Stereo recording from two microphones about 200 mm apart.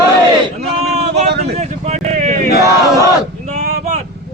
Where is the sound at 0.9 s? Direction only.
35° right (ahead or behind).